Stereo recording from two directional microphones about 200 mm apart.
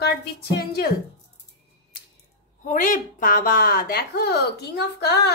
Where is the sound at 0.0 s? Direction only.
55° left (ahead or behind).